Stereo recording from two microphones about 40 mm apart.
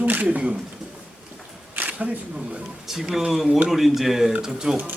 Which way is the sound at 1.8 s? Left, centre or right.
Right.